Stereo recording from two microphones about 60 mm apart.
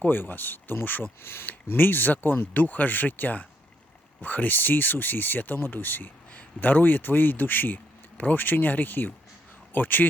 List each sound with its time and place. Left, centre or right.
0.0 s speech: left